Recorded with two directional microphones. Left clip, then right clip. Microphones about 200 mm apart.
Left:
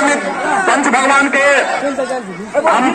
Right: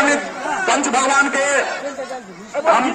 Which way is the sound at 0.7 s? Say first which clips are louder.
Left 4 dB; 25° left (ahead or behind).